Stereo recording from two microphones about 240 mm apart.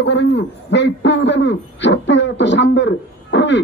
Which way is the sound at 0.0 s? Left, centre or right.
Left.